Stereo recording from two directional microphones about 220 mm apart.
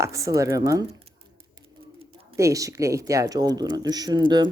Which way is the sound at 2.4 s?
15° right (ahead or behind).